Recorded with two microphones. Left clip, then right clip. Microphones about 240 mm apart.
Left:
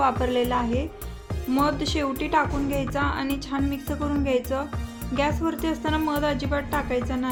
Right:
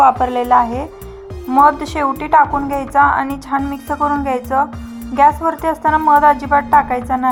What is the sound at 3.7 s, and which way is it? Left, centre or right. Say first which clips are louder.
Speech: right 11 dB; centre.